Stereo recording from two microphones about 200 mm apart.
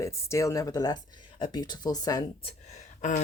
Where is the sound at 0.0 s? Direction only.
15° left (ahead or behind).